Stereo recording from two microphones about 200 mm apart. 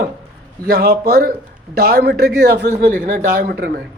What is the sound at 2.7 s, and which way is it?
Speech, 40° right (ahead or behind).